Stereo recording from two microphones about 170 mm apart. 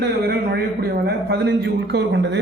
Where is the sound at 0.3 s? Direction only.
70° right (ahead or behind).